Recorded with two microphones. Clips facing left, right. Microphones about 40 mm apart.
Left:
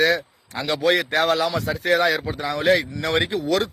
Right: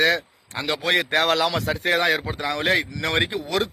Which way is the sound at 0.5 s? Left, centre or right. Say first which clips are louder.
Left 1 dB; right.